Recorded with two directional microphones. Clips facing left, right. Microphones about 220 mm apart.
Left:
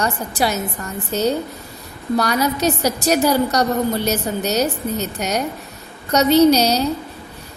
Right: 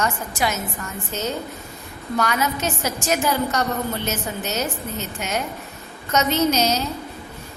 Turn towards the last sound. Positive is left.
turn(degrees=35)  # may be behind; listen again after turning